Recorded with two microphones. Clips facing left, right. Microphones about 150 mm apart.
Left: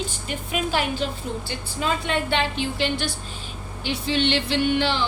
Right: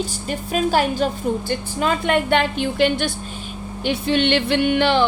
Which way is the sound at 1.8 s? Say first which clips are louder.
Right 5 dB; 55° right (ahead or behind).